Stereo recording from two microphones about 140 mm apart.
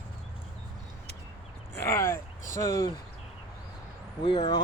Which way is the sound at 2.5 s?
25° left (ahead or behind).